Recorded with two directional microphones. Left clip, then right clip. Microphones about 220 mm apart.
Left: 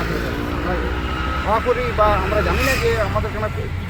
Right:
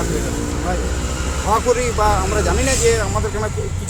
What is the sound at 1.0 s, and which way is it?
Vehicle, 60° right (ahead or behind).